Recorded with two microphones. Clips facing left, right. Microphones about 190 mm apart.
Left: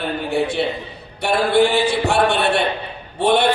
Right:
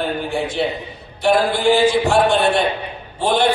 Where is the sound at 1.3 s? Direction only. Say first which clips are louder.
Right 1 dB; 65° left (ahead or behind).